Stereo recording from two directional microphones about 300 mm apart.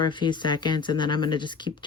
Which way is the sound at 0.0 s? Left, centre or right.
Centre.